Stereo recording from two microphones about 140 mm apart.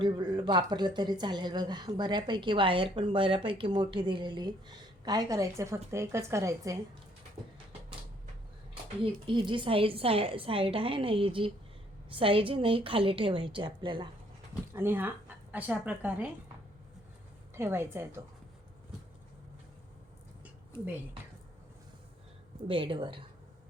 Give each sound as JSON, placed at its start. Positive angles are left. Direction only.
{"t": 0.0, "sound": "a woman's voice", "side_deg": -30}
{"t": 9.2, "sound": "speech", "side_deg": -35}
{"t": 14.7, "sound": "a woman's voice", "side_deg": -15}
{"t": 17.5, "sound": "a woman's voice", "side_deg": -15}
{"t": 20.4, "sound": "a sound", "side_deg": -10}
{"t": 22.6, "sound": "speech", "side_deg": -40}